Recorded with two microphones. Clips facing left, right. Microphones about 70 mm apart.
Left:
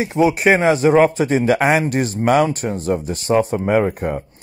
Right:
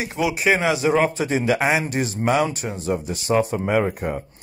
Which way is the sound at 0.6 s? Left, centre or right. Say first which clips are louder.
Left 6 dB; left.